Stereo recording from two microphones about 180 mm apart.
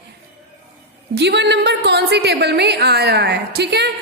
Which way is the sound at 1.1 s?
70° right (ahead or behind).